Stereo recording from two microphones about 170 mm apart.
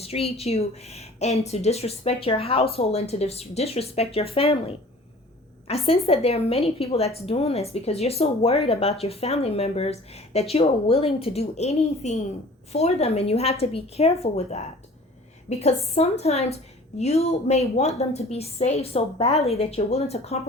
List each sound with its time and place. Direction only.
0.0 s a woman's voice: 35° left (ahead or behind)
5.6 s a woman's voice: 35° left (ahead or behind)